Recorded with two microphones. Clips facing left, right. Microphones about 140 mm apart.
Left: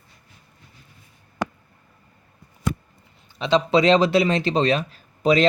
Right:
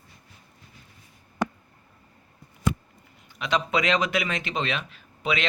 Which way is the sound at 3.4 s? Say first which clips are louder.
Left 7 dB; 30° left (ahead or behind).